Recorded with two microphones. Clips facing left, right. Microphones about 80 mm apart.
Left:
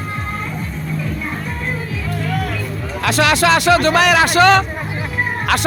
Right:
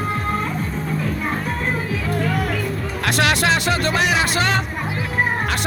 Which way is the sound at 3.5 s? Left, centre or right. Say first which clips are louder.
Left 7 dB; left.